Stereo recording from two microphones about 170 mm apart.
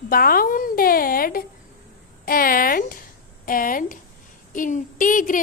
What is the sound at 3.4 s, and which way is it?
A woman's voice, 55° left (ahead or behind).